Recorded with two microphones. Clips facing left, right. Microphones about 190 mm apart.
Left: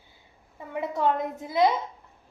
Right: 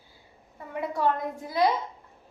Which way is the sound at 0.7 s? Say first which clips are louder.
Left 1 dB; 20° left (ahead or behind).